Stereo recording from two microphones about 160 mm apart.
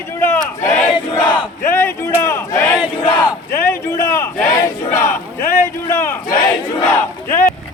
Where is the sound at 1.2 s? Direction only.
10° left (ahead or behind).